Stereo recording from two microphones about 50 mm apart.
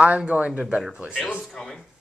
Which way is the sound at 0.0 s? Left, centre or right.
Right.